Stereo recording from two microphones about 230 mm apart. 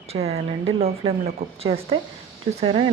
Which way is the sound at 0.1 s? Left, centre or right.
Right.